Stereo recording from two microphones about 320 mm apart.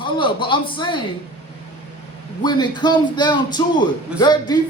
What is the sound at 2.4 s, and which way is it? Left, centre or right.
Speech, centre.